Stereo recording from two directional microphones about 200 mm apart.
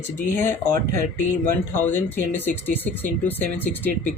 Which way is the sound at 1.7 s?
10° left (ahead or behind).